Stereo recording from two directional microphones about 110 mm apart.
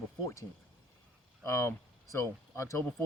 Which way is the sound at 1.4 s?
25° left (ahead or behind).